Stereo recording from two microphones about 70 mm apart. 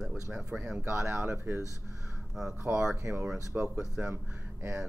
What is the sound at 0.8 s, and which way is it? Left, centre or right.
Speech, right.